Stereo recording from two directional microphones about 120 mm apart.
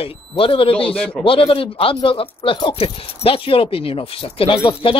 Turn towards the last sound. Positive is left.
turn(degrees=45)  # may be behind; listen again after turning